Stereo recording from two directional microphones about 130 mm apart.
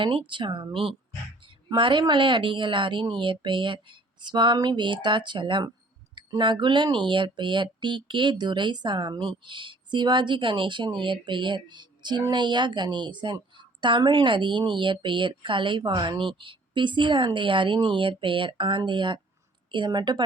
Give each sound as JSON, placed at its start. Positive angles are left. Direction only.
{"t": 0.0, "sound": "a woman's voice", "side_deg": -40}